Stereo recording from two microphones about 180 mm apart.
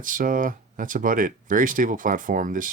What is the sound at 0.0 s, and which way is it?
Speech, 50° right (ahead or behind).